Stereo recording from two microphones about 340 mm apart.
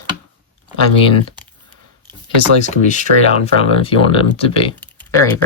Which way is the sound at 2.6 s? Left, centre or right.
Left.